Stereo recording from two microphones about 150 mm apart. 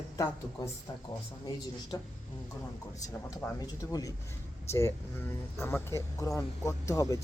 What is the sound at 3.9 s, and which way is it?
A man's voice, 25° left (ahead or behind).